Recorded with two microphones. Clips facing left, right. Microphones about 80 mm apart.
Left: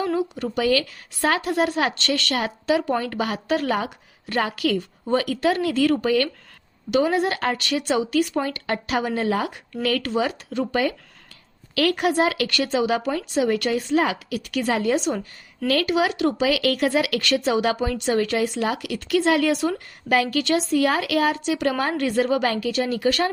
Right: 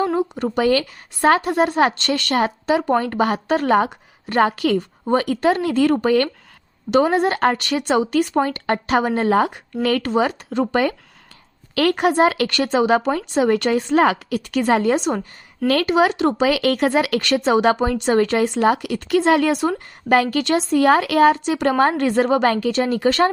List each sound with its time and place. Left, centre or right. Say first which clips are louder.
0.0 s a woman's voice: right 4 dB; right